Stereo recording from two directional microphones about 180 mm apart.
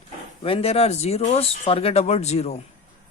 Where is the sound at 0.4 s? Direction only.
30° left (ahead or behind).